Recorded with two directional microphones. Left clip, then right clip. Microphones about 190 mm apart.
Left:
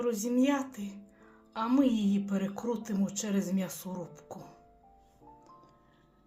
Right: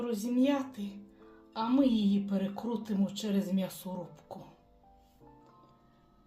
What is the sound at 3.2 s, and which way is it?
Speech, 20° left (ahead or behind).